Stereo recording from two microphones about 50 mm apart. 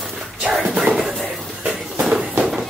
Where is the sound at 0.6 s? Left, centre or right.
Right.